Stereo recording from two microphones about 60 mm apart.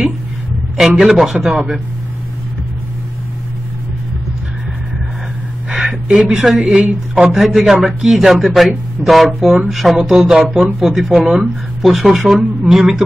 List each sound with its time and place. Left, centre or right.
1.0 s speech: centre
5.7 s a sound: centre
6.6 s speech: centre
10.6 s speech: centre